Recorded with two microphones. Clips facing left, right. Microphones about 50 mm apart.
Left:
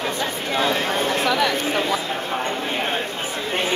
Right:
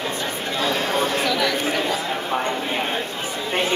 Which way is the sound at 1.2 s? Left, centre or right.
Left.